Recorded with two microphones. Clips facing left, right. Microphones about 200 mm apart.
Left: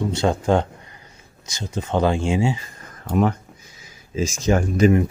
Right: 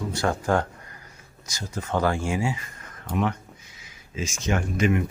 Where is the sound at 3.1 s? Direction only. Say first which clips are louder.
Left 6 dB; 40° left (ahead or behind).